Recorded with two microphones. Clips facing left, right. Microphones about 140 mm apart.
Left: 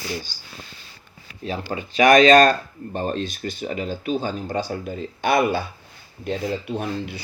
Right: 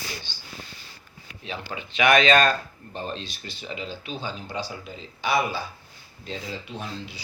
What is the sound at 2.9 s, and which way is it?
Speech, 50° left (ahead or behind).